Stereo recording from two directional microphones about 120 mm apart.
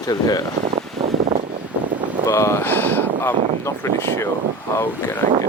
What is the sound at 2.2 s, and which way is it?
Speech, 25° left (ahead or behind).